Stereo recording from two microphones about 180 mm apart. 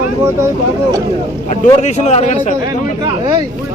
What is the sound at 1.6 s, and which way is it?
Speech, 40° left (ahead or behind).